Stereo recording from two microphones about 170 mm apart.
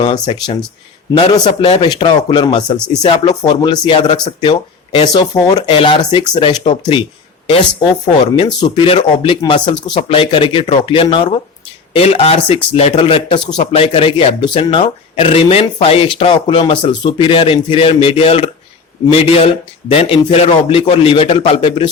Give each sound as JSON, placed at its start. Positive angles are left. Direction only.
{"t": 0.0, "sound": "speech", "side_deg": 25}
{"t": 2.7, "sound": "speech", "side_deg": 5}
{"t": 3.0, "sound": "speech", "side_deg": 30}
{"t": 8.4, "sound": "speech", "side_deg": 30}